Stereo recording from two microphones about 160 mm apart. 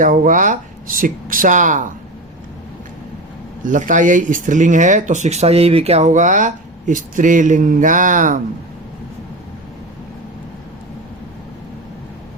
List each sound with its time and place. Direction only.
0.0 s speech: 55° right (ahead or behind)
3.6 s speech: 55° right (ahead or behind)